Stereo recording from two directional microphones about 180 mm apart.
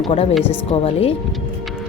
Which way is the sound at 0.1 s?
35° left (ahead or behind).